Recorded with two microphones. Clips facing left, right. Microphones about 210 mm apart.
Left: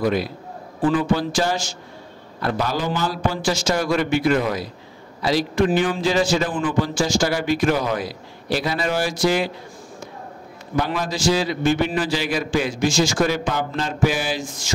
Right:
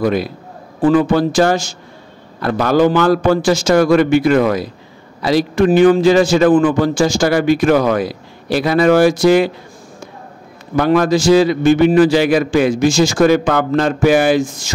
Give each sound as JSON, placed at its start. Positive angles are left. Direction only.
{"t": 0.0, "sound": "a man's voice", "side_deg": -55}
{"t": 10.8, "sound": "a man's voice", "side_deg": -55}